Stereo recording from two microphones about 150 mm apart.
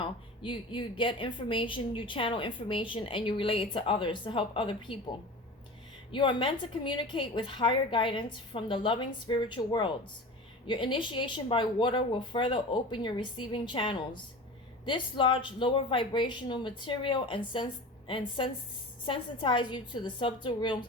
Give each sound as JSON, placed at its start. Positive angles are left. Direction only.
{"t": 0.0, "sound": "a woman's voice", "side_deg": 35}
{"t": 6.1, "sound": "a woman's voice", "side_deg": 30}